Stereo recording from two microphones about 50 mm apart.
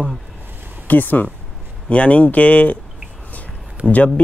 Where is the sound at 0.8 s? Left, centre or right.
Left.